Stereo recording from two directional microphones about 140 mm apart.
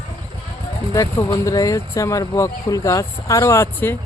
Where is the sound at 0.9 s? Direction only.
25° left (ahead or behind).